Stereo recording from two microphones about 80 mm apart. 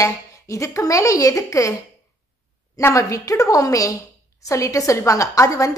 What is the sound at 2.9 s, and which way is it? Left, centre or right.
A woman's voice, left.